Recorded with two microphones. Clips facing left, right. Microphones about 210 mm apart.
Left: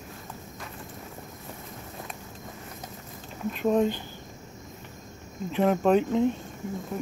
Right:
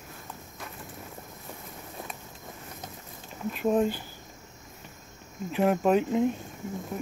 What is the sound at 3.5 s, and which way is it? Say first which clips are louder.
Speech: left 1 dB; 5° right (ahead or behind).